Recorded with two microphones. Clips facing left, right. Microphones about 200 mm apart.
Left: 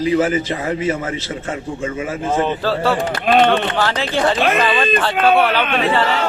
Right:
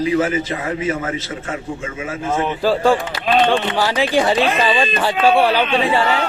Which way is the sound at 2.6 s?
10° right (ahead or behind).